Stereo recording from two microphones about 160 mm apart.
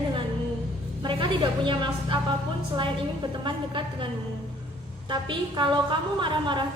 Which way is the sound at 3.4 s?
30° right (ahead or behind).